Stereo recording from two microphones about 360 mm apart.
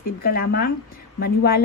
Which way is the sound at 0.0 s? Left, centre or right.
Left.